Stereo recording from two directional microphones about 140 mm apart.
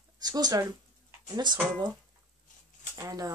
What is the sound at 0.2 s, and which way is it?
Speech, 30° right (ahead or behind).